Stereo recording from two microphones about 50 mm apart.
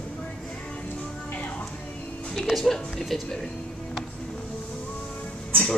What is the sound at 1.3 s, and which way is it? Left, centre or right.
Music, left.